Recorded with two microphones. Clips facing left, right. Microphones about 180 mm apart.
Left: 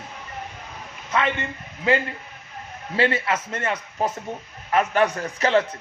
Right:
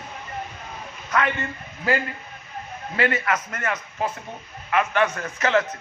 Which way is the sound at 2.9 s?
30° left (ahead or behind).